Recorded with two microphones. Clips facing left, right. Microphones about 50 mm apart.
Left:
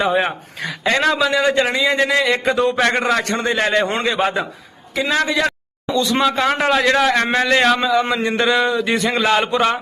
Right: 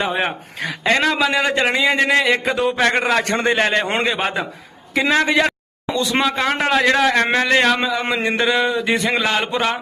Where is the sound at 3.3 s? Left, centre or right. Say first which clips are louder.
Right 1 dB; right.